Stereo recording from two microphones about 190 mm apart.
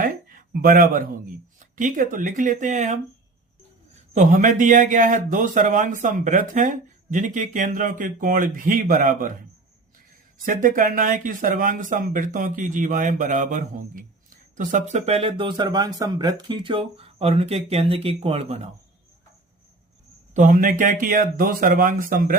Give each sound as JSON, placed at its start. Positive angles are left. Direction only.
{"t": 0.0, "sound": "a sound", "side_deg": -45}
{"t": 1.5, "sound": "a man's voice", "side_deg": -45}
{"t": 4.1, "sound": "a man's voice", "side_deg": -40}
{"t": 10.4, "sound": "speech", "side_deg": -45}
{"t": 20.3, "sound": "a man's voice", "side_deg": -40}